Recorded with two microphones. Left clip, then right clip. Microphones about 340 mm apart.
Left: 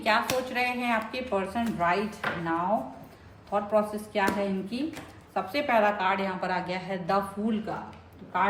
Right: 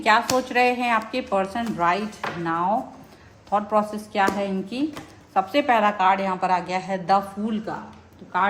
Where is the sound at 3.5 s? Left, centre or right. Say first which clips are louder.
Right 4 dB; right.